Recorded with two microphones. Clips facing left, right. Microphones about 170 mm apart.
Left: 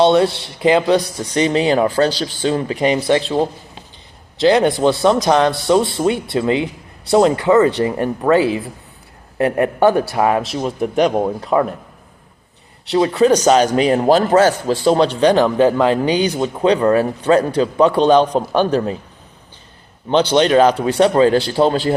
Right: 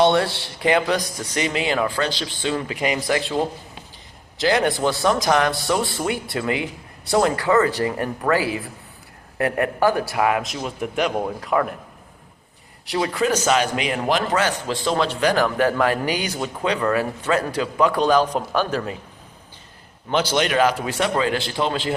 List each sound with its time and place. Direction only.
0.0 s a man's voice: 20° left (ahead or behind)
12.9 s a man's voice: 30° left (ahead or behind)
20.3 s a man's voice: 30° left (ahead or behind)